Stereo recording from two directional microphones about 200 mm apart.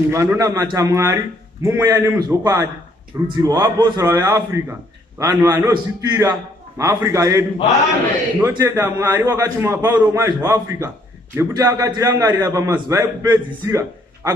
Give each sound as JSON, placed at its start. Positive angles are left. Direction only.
{"t": 0.1, "sound": "a man's voice", "side_deg": -15}